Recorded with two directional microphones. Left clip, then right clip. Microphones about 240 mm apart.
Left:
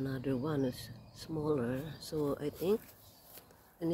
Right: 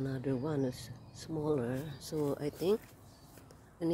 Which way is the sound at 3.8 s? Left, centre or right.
Centre.